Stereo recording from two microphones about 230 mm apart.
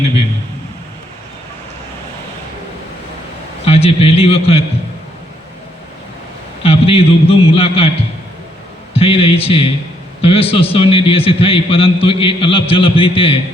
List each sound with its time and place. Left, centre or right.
3.7 s a man's voice: left
6.6 s a man's voice: left
8.9 s a man's voice: left